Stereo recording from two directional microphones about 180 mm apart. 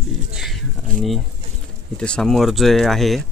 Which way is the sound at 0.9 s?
50° right (ahead or behind).